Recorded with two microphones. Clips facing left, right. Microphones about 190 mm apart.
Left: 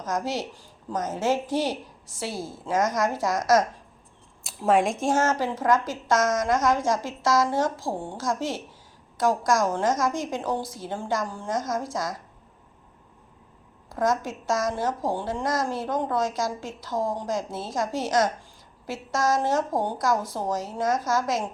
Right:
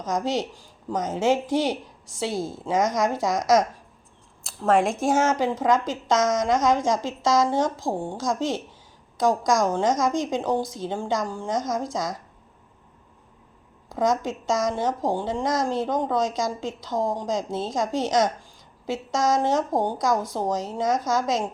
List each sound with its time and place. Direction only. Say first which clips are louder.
0.0 s speech: right 3 dB; 15° right (ahead or behind)
4.4 s speech: right 1 dB; centre (ahead or behind); by 12.1 s 15° right (ahead or behind)
13.9 s speech: right 2 dB; 15° right (ahead or behind)